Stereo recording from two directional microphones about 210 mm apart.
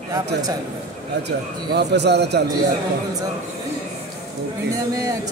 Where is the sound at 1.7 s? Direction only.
50° right (ahead or behind).